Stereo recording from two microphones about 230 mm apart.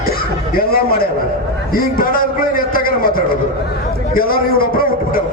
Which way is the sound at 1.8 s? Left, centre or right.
Left.